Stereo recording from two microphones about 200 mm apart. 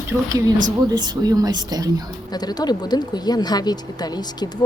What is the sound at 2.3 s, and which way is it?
Speech, 20° left (ahead or behind).